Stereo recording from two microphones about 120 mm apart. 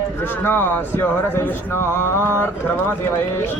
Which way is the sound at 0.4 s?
15° left (ahead or behind).